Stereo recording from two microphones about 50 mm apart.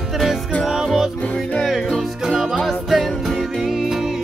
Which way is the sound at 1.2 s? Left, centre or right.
Left.